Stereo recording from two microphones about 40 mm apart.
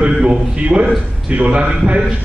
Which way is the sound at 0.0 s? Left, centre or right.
Right.